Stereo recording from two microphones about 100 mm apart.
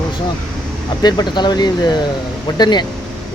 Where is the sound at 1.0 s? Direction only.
45° left (ahead or behind).